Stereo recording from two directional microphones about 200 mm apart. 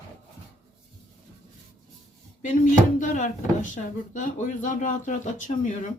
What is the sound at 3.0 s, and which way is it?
Speech, 40° left (ahead or behind).